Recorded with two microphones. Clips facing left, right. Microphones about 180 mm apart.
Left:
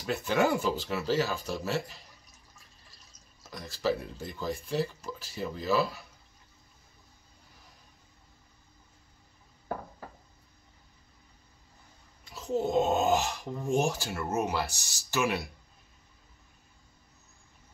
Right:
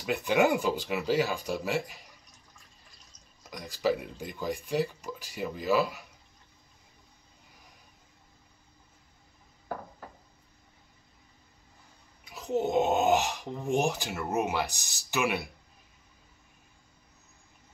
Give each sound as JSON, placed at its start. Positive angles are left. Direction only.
{"t": 0.0, "sound": "speech", "side_deg": -15}
{"t": 3.4, "sound": "speech", "side_deg": -15}
{"t": 12.3, "sound": "speech", "side_deg": -15}